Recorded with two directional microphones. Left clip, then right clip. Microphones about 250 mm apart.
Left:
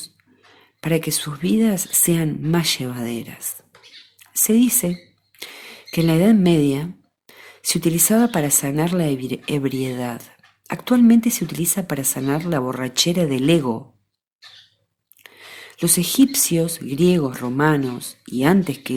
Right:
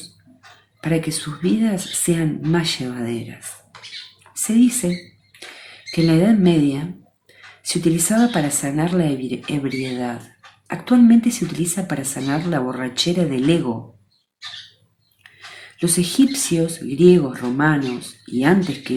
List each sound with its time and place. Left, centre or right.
0.8 s speech: left
4.4 s speech: left
15.2 s speech: left